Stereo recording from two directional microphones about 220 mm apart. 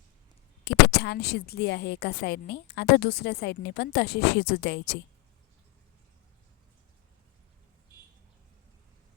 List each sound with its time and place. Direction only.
0.6 s a woman's voice: 50° left (ahead or behind)